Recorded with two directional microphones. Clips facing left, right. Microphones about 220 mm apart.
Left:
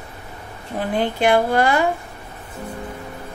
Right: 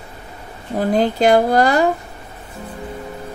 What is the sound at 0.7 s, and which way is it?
A woman's voice, 40° right (ahead or behind).